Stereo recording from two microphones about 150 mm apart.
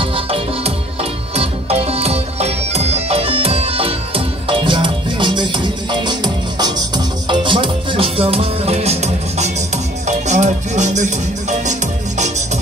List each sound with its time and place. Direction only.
0.0 s music: 35° right (ahead or behind); by 11.7 s 55° right (ahead or behind)